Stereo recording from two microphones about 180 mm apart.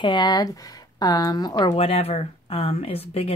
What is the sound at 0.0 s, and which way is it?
Speech, 25° left (ahead or behind).